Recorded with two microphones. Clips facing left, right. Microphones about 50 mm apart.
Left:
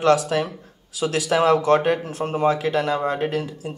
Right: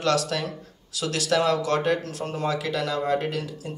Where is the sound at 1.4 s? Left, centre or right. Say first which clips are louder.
Left 6 dB; left.